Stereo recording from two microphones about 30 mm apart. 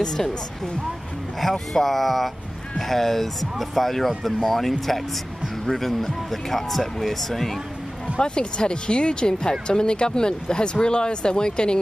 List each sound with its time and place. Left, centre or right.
0.0 s speech: centre
1.4 s speech: centre
8.2 s speech: left